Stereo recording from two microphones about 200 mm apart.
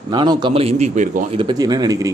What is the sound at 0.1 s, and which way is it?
Speech, 20° right (ahead or behind).